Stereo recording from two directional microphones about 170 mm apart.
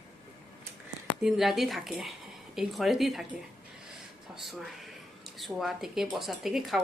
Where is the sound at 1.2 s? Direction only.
Centre (ahead or behind).